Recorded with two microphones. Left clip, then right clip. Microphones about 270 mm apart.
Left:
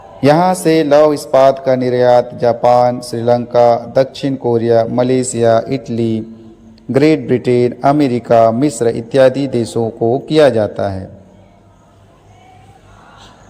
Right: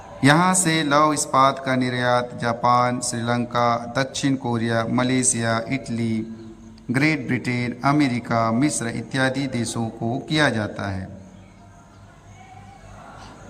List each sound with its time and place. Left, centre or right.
0.2 s a man's voice: centre
9.7 s speech: centre
10.2 s a man's voice: centre